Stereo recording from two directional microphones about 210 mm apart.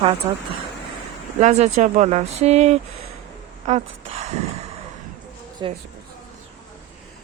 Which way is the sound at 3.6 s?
30° right (ahead or behind).